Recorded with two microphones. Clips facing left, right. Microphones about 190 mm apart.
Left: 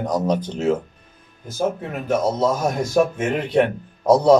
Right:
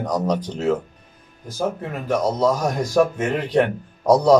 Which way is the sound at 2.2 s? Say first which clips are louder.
Right 2 dB; 25° left (ahead or behind).